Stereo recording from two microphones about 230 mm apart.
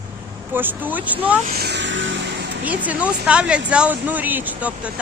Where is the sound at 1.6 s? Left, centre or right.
Right.